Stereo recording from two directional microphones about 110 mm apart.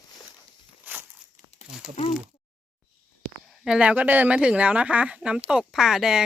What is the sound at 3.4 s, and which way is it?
Speech, 5° right (ahead or behind).